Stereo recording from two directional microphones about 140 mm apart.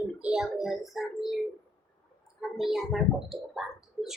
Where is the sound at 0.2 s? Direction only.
5° right (ahead or behind).